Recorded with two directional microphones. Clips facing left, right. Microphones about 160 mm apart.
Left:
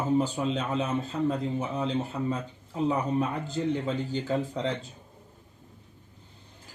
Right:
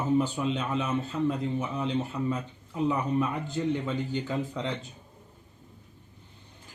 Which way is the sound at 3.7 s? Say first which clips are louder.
Left 1 dB; 35° left (ahead or behind).